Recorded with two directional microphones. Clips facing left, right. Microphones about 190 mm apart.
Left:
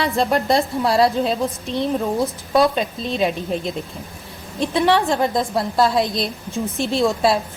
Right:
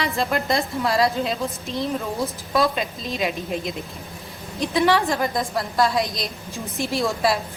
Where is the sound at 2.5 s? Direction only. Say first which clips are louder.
Left 5 dB; 30° left (ahead or behind).